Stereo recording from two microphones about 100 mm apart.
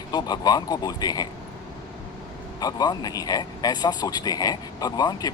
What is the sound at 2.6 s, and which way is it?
A man's voice, 40° left (ahead or behind).